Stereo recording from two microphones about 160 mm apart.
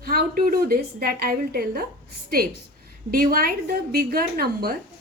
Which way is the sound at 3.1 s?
65° right (ahead or behind).